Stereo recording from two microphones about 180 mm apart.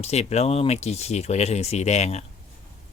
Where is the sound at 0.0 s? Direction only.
35° left (ahead or behind).